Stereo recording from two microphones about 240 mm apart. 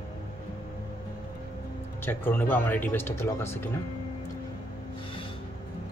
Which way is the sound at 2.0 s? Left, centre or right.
Centre.